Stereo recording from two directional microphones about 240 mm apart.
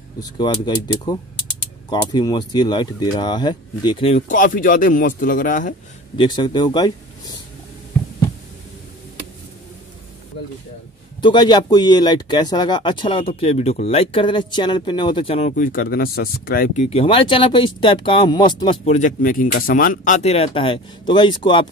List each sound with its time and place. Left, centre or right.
0.4 s speech: centre
6.1 s speech: centre
11.1 s speech: centre
15.5 s speech: left; by 21.6 s centre